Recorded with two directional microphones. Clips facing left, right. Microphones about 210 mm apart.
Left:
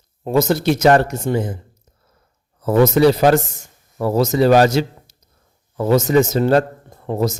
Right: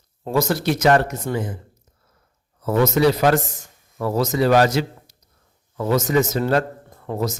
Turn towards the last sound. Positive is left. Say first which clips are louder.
# left 5 dB
turn(degrees=25)  # may be behind; listen again after turning